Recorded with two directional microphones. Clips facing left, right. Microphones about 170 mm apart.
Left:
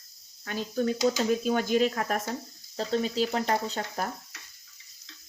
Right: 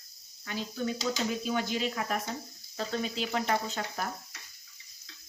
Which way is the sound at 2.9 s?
35° left (ahead or behind).